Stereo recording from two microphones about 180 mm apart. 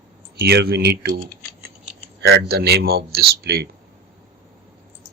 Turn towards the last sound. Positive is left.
turn(degrees=-60)  # may be behind; listen again after turning